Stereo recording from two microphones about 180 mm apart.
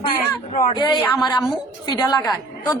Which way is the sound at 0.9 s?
Centre (ahead or behind).